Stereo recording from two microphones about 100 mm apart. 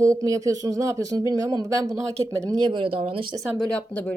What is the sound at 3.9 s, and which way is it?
Speech, 15° left (ahead or behind).